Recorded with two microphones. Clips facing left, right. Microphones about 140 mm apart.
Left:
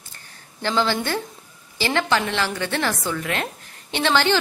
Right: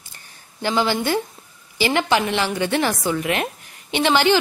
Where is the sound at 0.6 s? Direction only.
15° right (ahead or behind).